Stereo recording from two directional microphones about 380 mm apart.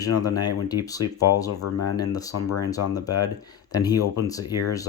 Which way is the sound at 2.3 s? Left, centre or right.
Left.